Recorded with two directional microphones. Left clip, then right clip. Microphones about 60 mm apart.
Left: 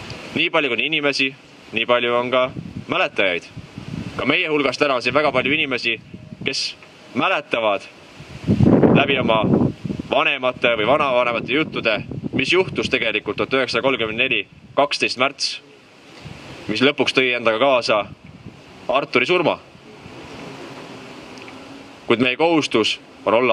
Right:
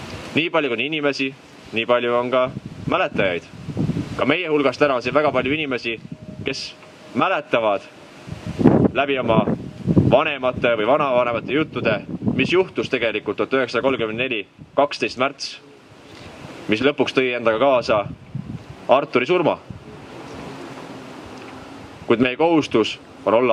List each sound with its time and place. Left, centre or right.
0.1 s a man's voice: left
9.0 s speech: left
16.7 s speech: left
22.0 s speech: left